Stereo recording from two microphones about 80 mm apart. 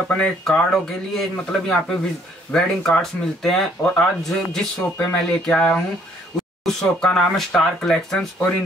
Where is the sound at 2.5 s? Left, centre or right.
Centre.